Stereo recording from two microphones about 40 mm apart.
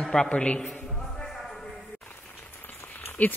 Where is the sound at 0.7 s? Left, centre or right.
Centre.